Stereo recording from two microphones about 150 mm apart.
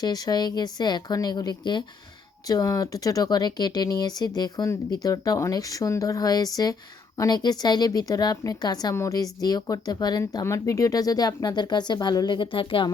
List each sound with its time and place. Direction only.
0.0 s a woman's voice: 25° left (ahead or behind)